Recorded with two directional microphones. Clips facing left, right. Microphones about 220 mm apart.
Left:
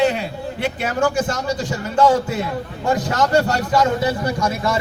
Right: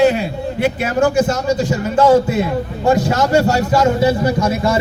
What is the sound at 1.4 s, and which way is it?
Speech, 25° right (ahead or behind).